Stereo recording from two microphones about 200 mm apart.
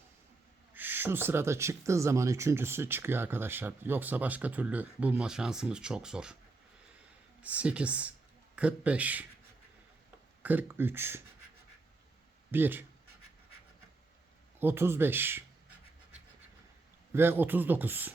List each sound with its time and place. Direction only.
0.7 s speech: 10° right (ahead or behind)
7.4 s speech: 5° right (ahead or behind)
10.4 s speech: 10° right (ahead or behind)
12.5 s speech: 10° right (ahead or behind)
14.6 s speech: 10° right (ahead or behind)
17.1 s speech: 10° right (ahead or behind)